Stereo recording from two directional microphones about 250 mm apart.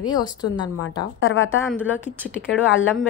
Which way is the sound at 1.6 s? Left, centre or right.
Centre.